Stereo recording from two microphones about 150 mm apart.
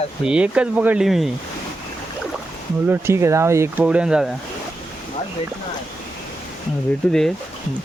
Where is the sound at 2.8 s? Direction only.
15° right (ahead or behind).